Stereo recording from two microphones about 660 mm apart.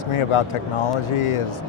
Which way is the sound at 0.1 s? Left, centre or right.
Left.